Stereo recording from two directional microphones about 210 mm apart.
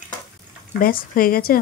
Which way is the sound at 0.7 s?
45° left (ahead or behind).